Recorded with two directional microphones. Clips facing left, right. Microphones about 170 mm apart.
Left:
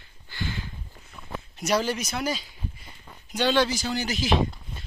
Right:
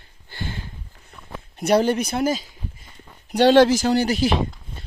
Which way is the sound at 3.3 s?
75° right (ahead or behind).